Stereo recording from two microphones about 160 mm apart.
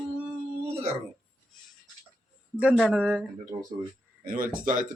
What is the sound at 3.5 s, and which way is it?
Speech, 40° right (ahead or behind).